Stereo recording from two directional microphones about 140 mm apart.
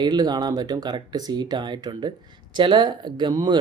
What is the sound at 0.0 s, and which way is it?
Speech, 30° right (ahead or behind).